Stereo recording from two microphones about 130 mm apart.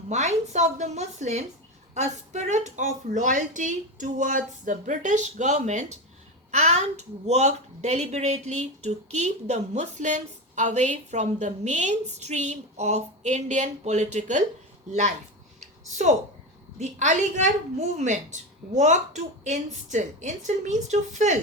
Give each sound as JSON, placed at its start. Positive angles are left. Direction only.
{"t": 0.1, "sound": "a woman's voice", "side_deg": -60}
{"t": 16.7, "sound": "a woman's voice", "side_deg": -65}